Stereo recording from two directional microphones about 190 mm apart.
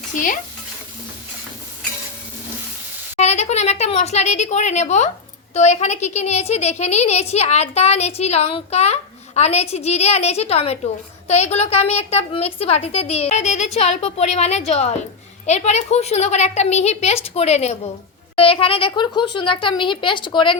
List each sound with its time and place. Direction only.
3.2 s a woman's voice: 35° left (ahead or behind)